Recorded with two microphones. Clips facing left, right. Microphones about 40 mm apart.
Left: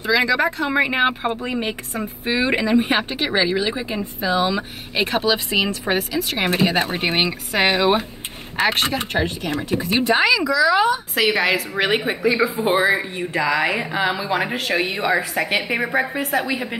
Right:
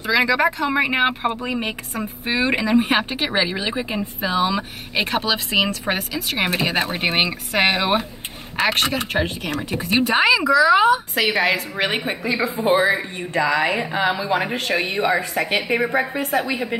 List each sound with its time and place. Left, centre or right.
0.1 s speech: centre
0.6 s a woman's voice: centre
3.3 s speech: right
4.4 s speech: centre
5.5 s speech: centre
5.9 s a woman's voice: centre
9.1 s a woman's voice: centre
9.7 s speech: centre
11.1 s a woman's voice: centre